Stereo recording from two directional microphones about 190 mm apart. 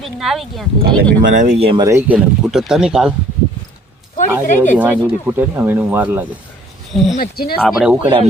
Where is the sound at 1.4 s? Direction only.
35° right (ahead or behind).